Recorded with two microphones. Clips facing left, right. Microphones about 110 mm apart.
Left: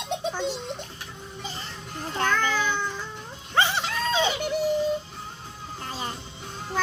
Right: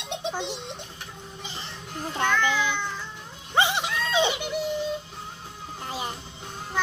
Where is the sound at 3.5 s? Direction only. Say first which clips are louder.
Even; 15° right (ahead or behind).